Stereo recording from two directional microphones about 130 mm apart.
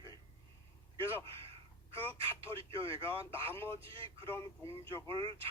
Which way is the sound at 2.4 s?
45° right (ahead or behind).